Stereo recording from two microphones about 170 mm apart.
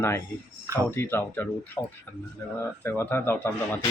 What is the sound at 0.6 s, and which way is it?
Speech, 20° right (ahead or behind).